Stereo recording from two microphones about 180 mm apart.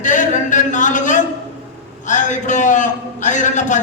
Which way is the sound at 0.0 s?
45° left (ahead or behind).